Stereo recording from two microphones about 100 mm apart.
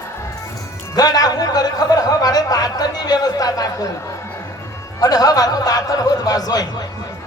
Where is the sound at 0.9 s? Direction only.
40° left (ahead or behind).